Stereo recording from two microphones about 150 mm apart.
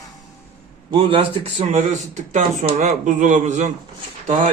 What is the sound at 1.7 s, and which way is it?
Speech, 55° right (ahead or behind).